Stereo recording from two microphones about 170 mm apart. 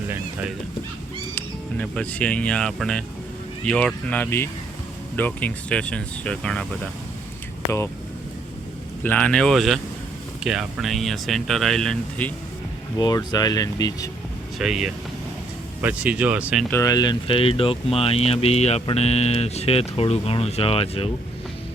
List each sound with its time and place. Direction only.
1.4 s speech: 10° left (ahead or behind)
9.0 s speech: 5° left (ahead or behind)
13.0 s speech: 25° left (ahead or behind)
14.6 s speech: 5° right (ahead or behind)
16.6 s speech: 15° left (ahead or behind); by 21.1 s 35° left (ahead or behind)